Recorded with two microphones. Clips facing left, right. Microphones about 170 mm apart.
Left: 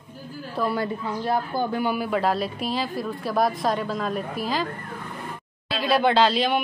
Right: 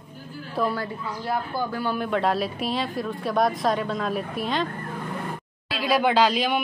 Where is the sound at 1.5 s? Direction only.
20° left (ahead or behind).